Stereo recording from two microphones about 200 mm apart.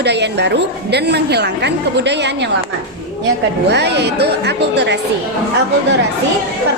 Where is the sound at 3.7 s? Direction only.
60° right (ahead or behind).